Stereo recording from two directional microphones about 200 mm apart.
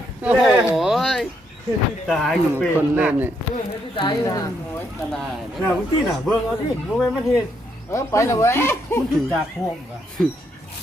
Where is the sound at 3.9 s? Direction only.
20° left (ahead or behind).